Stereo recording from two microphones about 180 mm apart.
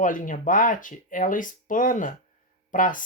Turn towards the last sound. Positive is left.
turn(degrees=50)  # may be behind; listen again after turning